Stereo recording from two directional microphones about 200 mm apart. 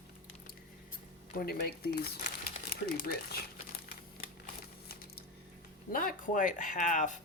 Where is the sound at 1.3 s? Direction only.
50° left (ahead or behind).